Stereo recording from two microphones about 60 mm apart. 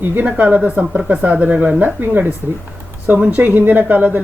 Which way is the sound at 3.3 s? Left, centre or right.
Right.